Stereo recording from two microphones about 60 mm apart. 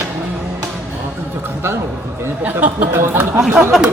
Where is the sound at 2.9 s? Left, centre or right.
Right.